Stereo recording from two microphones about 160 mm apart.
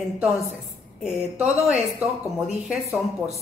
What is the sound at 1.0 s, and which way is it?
Speech, 5° right (ahead or behind).